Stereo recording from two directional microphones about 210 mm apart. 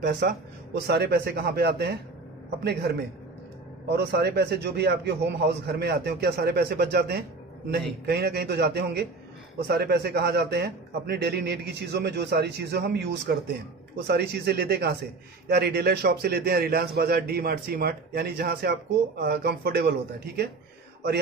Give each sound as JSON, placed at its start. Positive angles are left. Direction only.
{"t": 0.0, "sound": "a man's voice", "side_deg": -50}